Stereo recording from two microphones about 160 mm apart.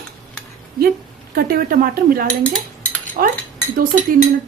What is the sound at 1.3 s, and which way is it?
Speech, 70° right (ahead or behind).